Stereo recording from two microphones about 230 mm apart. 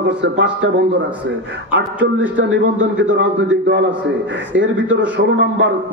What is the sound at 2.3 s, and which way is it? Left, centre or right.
A man's voice, right.